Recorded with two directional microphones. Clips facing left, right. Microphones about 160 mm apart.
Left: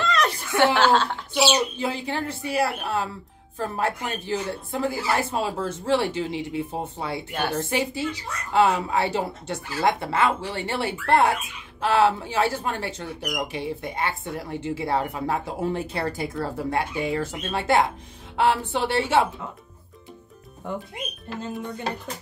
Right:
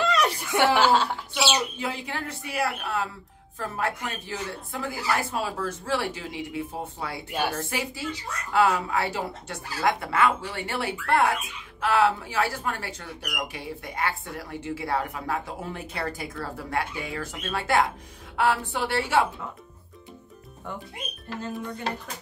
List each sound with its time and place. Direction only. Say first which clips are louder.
0.0 s chuckle: even; 10° right (ahead or behind)
0.7 s a woman's voice: left 1 dB; 10° right (ahead or behind)
1.3 s speech: left 6 dB; 30° left (ahead or behind)